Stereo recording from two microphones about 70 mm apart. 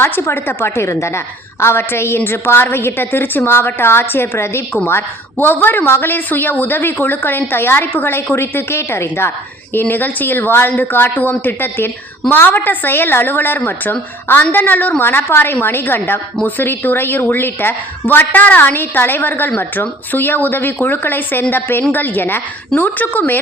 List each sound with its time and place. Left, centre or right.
0.0 s a woman's voice: left